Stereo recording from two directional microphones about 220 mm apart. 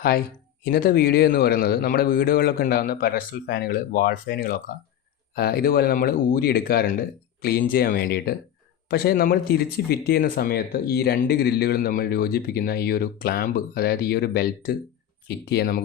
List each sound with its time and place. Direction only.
0.6 s speech: 45° left (ahead or behind)